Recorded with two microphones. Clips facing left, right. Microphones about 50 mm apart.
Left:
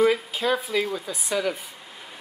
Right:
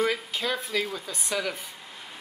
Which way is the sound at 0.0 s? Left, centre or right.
Centre.